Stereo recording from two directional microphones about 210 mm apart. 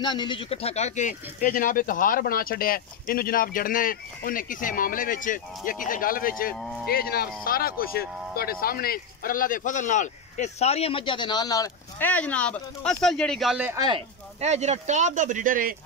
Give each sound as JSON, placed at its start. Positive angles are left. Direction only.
{"t": 0.0, "sound": "speech", "side_deg": 20}
{"t": 13.7, "sound": "speech", "side_deg": -25}